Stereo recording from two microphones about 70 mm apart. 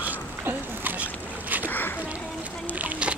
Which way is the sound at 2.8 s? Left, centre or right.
Centre.